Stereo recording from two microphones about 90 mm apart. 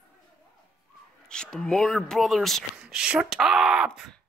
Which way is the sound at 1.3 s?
5° left (ahead or behind).